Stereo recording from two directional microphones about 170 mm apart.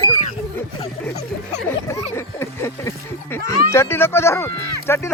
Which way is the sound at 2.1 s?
15° left (ahead or behind).